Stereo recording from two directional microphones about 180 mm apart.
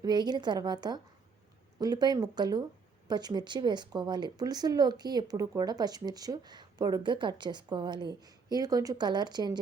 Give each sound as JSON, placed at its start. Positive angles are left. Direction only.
{"t": 0.0, "sound": "speech", "side_deg": -25}